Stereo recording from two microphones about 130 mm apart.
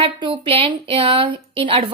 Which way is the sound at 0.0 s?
40° right (ahead or behind).